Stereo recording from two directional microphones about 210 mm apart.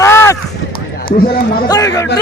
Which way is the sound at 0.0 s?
15° left (ahead or behind).